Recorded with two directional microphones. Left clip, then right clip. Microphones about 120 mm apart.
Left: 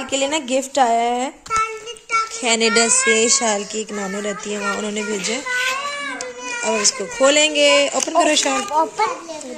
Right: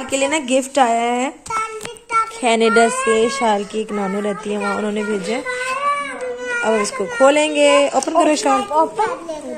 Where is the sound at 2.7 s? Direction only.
20° left (ahead or behind).